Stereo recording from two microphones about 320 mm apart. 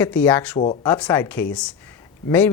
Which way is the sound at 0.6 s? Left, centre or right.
Left.